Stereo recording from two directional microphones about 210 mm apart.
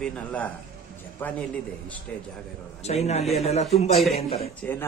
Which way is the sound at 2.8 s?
30° left (ahead or behind).